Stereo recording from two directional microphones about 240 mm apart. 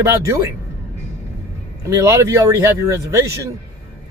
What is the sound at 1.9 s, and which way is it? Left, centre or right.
Speech, centre.